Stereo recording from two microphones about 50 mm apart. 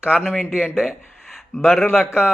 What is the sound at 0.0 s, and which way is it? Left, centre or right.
A man's voice, right.